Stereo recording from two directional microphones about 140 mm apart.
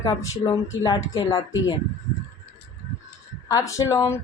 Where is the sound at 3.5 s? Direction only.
25° left (ahead or behind).